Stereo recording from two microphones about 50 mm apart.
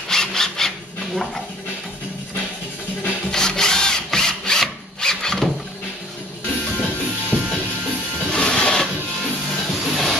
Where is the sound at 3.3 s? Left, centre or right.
Centre.